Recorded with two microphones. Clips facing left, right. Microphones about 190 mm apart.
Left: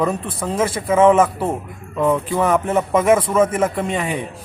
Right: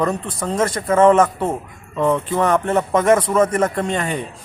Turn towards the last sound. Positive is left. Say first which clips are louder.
# even
turn(degrees=0)  # may be behind; listen again after turning